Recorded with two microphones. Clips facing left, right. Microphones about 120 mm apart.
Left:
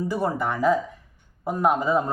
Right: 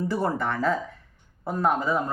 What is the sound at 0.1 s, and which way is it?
Speech, 15° left (ahead or behind).